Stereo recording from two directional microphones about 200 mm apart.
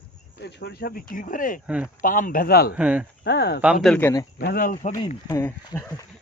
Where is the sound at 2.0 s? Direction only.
45° left (ahead or behind).